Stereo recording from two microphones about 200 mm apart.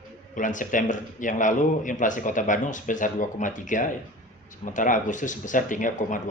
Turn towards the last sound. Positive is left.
turn(degrees=40)  # may be behind; listen again after turning